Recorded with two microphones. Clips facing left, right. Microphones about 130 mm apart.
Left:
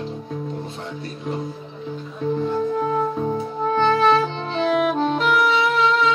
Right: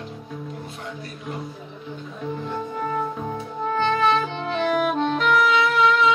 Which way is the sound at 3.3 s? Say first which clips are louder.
Left 4 dB; 35° left (ahead or behind).